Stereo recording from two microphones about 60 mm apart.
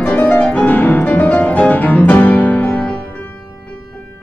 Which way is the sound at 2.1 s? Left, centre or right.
Left.